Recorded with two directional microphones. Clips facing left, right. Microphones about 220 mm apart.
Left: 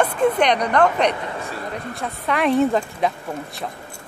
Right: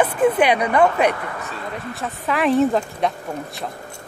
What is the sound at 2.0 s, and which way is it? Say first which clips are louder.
A woman's voice: even; centre (ahead or behind).